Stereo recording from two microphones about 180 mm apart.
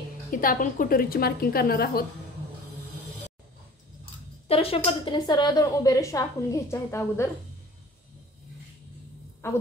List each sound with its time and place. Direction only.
0.3 s a woman's voice: 50° left (ahead or behind)
4.5 s speech: 30° left (ahead or behind); by 7.2 s 15° left (ahead or behind)
9.4 s a woman's voice: 15° left (ahead or behind)